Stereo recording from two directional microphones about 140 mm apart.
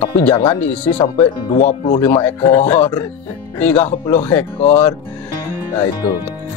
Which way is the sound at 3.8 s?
40° left (ahead or behind).